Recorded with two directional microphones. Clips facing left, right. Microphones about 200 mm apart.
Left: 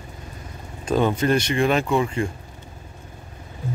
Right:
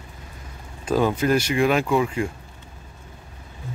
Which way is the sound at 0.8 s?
5° right (ahead or behind).